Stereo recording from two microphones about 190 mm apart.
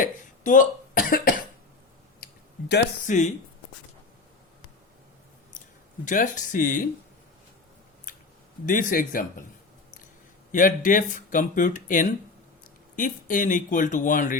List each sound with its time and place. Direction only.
0.0 s speech: 45° left (ahead or behind)
2.2 s a sound: 60° left (ahead or behind)
3.1 s speech: 40° left (ahead or behind)
6.1 s speech: 40° left (ahead or behind)
8.6 s speech: 45° left (ahead or behind)
10.5 s speech: 45° left (ahead or behind)